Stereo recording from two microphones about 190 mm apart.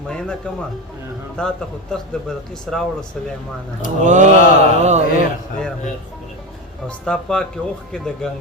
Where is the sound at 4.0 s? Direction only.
40° right (ahead or behind).